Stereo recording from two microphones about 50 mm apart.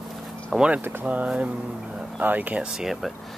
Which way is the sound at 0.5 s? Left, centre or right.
Right.